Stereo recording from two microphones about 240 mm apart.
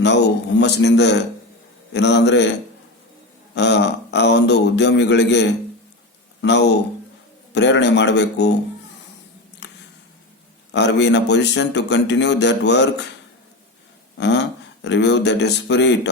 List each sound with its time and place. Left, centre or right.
0.0 s a man's voice: left
3.5 s a man's voice: left
9.6 s a sound: left
10.7 s a man's voice: left
14.2 s speech: left